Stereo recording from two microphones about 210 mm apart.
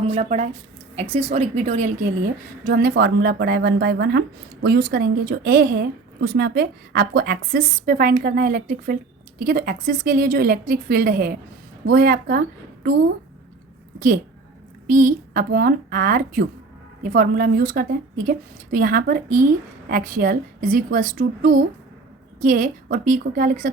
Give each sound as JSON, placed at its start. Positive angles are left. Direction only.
{"t": 0.1, "sound": "a woman's voice", "side_deg": -35}
{"t": 2.6, "sound": "a woman's voice", "side_deg": -45}
{"t": 14.8, "sound": "a woman's voice", "side_deg": -40}